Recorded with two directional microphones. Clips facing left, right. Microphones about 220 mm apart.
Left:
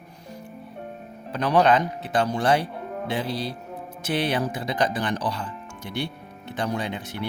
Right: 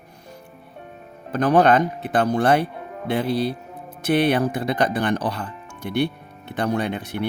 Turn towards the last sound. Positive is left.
turn(degrees=-60)  # may be behind; listen again after turning